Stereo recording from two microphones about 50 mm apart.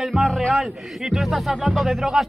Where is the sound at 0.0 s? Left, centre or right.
Centre.